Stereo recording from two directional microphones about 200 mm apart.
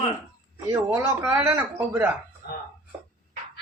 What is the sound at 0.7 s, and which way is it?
Speech, 15° right (ahead or behind).